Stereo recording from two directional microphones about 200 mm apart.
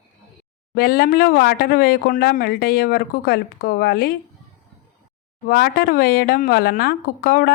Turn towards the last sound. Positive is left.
turn(degrees=50)  # may be behind; listen again after turning